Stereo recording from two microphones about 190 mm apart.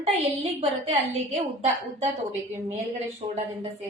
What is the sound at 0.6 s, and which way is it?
Speech, 35° right (ahead or behind).